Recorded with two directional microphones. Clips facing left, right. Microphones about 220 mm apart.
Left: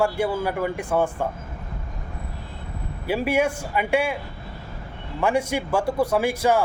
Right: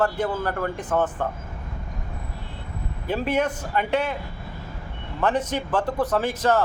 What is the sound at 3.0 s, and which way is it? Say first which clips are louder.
A man's voice: left 2 dB; 10° left (ahead or behind).